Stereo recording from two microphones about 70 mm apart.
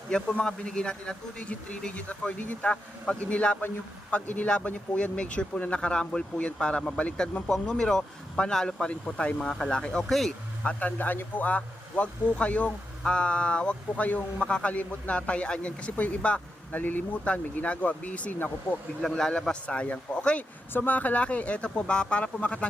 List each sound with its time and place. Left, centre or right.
0.1 s speech: centre
10.6 s speech: left
19.0 s speech: centre